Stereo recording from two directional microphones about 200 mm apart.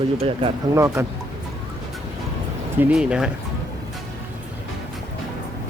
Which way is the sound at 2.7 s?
5° right (ahead or behind).